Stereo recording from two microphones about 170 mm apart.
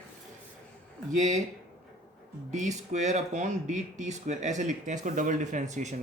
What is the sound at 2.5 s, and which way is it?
Speech, 45° right (ahead or behind).